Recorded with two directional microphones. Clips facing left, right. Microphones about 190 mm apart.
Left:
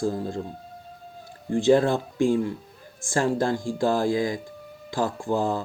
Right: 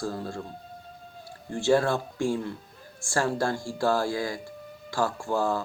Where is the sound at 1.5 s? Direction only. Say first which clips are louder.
Left 4 dB; 20° left (ahead or behind).